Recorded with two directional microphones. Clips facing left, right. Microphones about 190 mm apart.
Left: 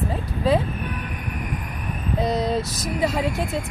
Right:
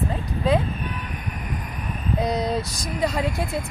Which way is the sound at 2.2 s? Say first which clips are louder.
Left 2 dB; centre (ahead or behind).